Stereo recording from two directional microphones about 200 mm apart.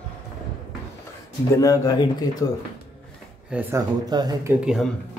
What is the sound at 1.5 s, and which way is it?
Speech, 15° left (ahead or behind).